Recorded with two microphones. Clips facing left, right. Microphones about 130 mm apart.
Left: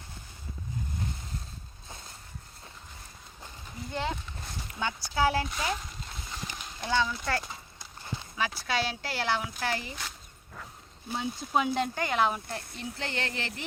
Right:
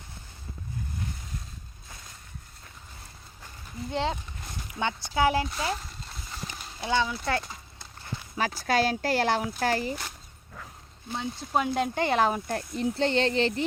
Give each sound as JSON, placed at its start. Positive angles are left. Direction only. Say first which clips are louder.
{"t": 3.9, "sound": "speech", "louder": "right 4 dB", "side_deg": -30}
{"t": 5.5, "sound": "speech", "louder": "right 2 dB", "side_deg": 0}
{"t": 6.3, "sound": "horse", "louder": "right 1 dB", "side_deg": -5}
{"t": 8.4, "sound": "speech", "louder": "right 5 dB", "side_deg": -45}
{"t": 11.1, "sound": "speech", "louder": "right 1 dB", "side_deg": 5}
{"t": 11.9, "sound": "speech", "louder": "right 3 dB", "side_deg": -35}